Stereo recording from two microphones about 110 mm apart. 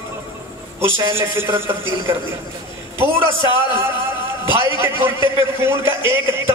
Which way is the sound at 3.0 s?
20° right (ahead or behind).